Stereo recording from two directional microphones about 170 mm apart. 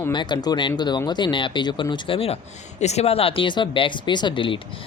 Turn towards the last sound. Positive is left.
turn(degrees=30)  # may be behind; listen again after turning